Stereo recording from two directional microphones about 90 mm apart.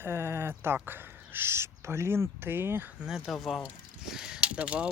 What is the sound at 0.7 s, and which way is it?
Speech, 25° right (ahead or behind).